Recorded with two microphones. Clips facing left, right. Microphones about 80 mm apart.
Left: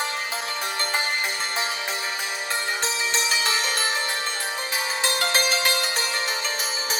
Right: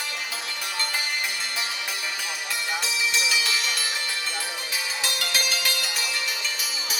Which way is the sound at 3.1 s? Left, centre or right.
Left.